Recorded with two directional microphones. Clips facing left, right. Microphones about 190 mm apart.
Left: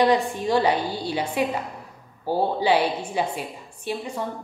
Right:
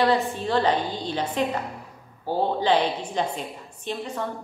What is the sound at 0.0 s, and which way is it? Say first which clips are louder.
A woman's voice: left 2 dB; 15° left (ahead or behind).